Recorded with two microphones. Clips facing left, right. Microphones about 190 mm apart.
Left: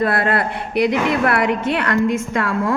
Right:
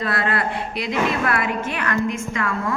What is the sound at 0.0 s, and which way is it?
A woman's voice, 55° left (ahead or behind).